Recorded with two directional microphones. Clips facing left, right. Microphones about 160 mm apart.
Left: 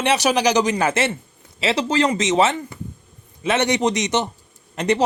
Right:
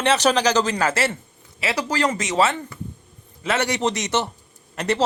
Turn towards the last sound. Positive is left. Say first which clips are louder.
# left 3 dB
turn(degrees=20)  # may be behind; listen again after turning